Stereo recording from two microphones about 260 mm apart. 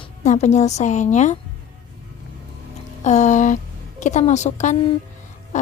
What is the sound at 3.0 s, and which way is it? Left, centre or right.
A woman's voice, left.